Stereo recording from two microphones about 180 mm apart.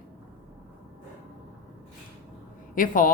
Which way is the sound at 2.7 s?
50° left (ahead or behind).